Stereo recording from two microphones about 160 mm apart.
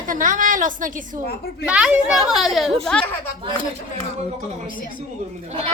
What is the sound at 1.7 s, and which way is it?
Speech, 5° right (ahead or behind).